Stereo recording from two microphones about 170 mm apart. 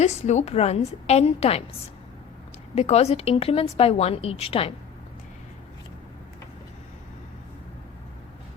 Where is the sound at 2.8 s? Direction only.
40° left (ahead or behind).